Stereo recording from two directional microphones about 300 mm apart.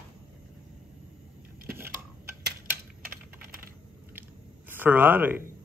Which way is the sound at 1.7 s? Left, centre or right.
Centre.